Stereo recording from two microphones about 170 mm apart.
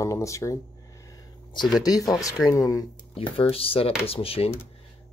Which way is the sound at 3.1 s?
35° left (ahead or behind).